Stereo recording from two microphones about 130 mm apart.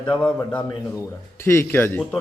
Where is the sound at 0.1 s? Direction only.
10° left (ahead or behind).